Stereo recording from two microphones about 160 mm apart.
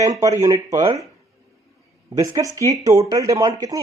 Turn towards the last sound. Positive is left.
turn(degrees=-25)  # may be behind; listen again after turning